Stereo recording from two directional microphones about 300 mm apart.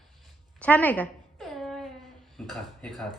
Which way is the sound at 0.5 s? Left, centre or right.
Centre.